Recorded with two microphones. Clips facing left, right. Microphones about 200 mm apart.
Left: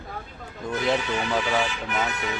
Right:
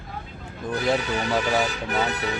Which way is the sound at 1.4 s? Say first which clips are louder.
Right 2 dB; 40° right (ahead or behind).